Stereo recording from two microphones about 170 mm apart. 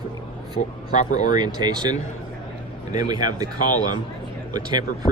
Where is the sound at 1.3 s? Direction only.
25° right (ahead or behind).